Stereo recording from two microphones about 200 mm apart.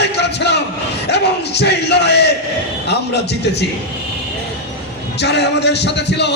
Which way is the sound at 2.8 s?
55° left (ahead or behind).